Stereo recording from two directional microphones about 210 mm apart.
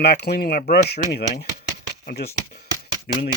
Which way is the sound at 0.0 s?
50° left (ahead or behind).